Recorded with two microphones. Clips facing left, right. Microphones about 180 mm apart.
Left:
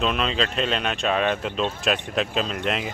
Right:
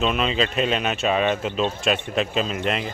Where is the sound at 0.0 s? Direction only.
5° right (ahead or behind).